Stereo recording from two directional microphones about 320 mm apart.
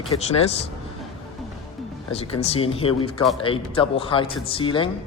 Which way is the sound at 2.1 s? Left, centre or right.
Centre.